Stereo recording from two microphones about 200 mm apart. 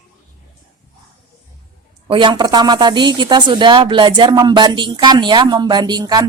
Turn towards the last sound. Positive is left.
turn(degrees=-20)  # may be behind; listen again after turning